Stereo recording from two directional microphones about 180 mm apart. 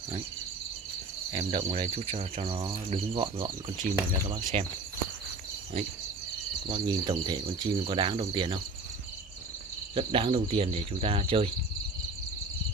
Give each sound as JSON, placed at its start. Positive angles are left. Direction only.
{"t": 1.3, "sound": "speech", "side_deg": -30}
{"t": 4.5, "sound": "speech", "side_deg": -35}
{"t": 6.7, "sound": "speech", "side_deg": -25}
{"t": 9.9, "sound": "speech", "side_deg": -30}